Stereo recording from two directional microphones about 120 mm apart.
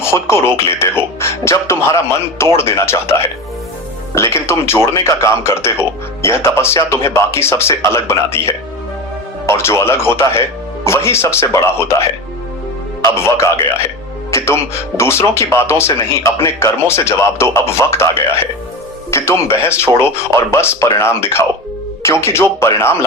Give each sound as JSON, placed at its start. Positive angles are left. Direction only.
{"t": 0.0, "sound": "speech", "side_deg": 20}
{"t": 13.1, "sound": "speech", "side_deg": 20}